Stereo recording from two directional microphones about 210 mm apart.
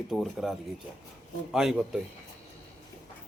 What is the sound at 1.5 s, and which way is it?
Speech, centre (ahead or behind).